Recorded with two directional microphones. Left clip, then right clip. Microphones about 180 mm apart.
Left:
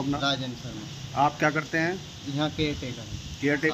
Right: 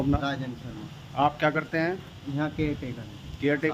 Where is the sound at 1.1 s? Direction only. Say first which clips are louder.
Even; 60° right (ahead or behind).